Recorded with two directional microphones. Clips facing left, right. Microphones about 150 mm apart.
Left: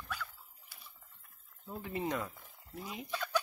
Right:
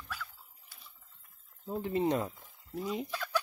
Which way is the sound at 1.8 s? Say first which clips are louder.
Right 6 dB; 30° right (ahead or behind).